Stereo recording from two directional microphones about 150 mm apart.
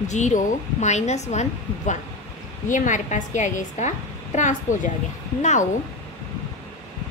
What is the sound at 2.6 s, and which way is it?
A woman's voice, 60° left (ahead or behind).